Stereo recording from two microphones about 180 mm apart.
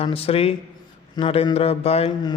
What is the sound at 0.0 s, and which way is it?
Speech, 30° left (ahead or behind).